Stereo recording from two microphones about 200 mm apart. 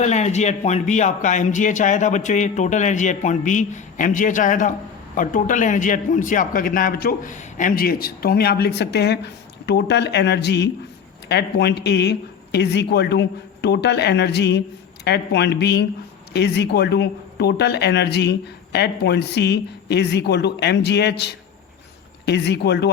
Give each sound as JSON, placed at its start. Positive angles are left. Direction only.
{"t": 0.0, "sound": "a man's voice", "side_deg": 35}